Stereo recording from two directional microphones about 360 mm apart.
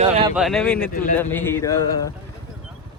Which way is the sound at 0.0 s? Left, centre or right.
Centre.